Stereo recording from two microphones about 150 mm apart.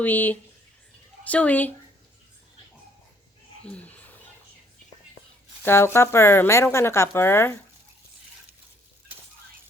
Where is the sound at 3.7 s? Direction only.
10° left (ahead or behind).